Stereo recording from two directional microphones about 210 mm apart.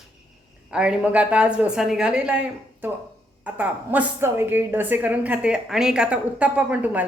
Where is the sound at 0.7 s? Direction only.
5° right (ahead or behind).